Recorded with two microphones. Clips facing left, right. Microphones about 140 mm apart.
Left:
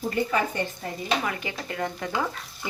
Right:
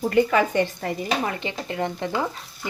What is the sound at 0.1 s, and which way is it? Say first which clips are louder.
Speech: right 7 dB; 90° right.